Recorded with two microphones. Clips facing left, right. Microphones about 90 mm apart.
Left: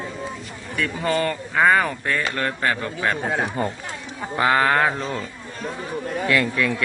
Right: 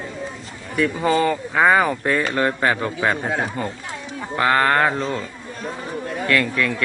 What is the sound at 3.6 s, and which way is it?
Speech, 35° left (ahead or behind).